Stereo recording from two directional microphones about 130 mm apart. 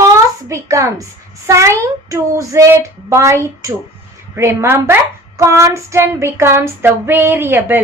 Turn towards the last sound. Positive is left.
turn(degrees=-15)  # may be behind; listen again after turning